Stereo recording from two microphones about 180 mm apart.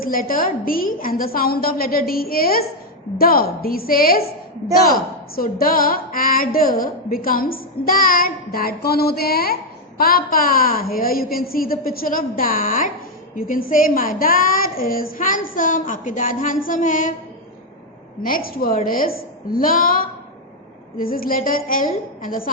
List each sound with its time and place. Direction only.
0.0 s a woman's voice: 50° left (ahead or behind)
18.2 s a woman's voice: 55° left (ahead or behind)